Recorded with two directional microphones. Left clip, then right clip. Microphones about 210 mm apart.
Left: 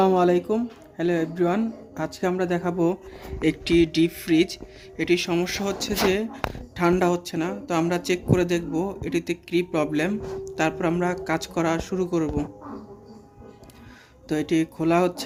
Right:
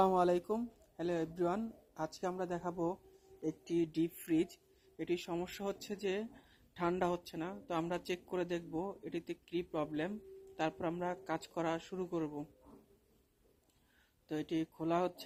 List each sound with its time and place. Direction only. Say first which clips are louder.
0.0 s speech: left 11 dB; 35° right (ahead or behind)
14.3 s speech: left 15 dB; 25° right (ahead or behind)